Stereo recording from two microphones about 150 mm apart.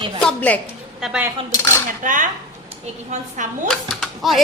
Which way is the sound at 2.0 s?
60° right (ahead or behind).